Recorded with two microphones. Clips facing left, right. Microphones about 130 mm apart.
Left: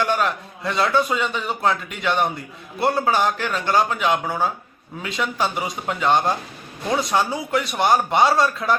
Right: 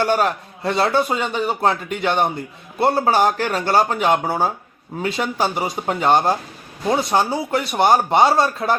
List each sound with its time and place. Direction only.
0.0 s speech: 35° right (ahead or behind)